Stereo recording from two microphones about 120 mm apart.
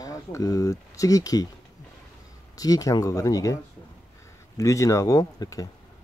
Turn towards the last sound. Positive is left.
turn(degrees=30)  # may be behind; listen again after turning